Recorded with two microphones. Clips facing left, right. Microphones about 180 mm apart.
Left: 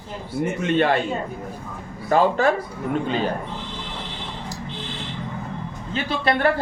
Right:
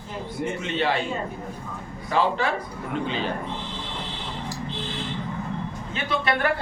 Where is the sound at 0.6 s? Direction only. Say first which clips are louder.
Left 6 dB; 50° left (ahead or behind).